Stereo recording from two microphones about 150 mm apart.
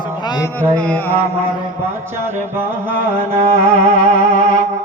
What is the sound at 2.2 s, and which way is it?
Music, 15° right (ahead or behind).